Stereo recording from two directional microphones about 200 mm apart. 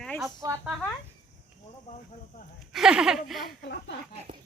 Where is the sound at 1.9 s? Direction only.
35° left (ahead or behind).